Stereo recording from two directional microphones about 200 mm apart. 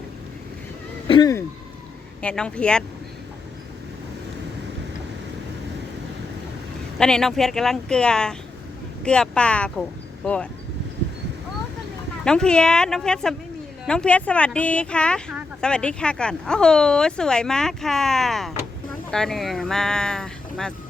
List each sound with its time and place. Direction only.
1.0 s speech: 20° left (ahead or behind)
2.2 s speech: 5° left (ahead or behind)
7.0 s speech: 5° left (ahead or behind)
12.2 s speech: 5° left (ahead or behind)